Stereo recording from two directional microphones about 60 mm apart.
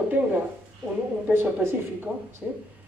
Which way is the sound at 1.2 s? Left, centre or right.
Right.